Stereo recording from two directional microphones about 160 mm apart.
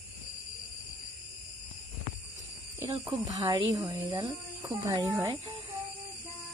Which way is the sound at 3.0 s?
20° right (ahead or behind).